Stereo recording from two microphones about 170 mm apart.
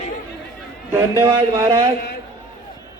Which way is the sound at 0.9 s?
20° right (ahead or behind).